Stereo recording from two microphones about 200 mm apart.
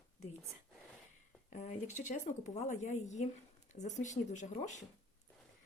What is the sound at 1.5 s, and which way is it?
Speech, 35° left (ahead or behind).